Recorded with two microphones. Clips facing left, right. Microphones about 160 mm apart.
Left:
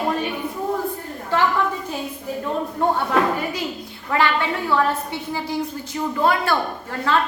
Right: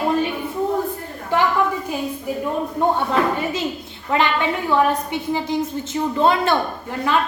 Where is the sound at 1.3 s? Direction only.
15° right (ahead or behind).